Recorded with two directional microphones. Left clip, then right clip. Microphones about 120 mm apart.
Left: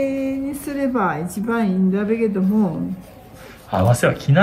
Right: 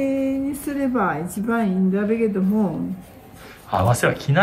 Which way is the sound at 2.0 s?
5° right (ahead or behind).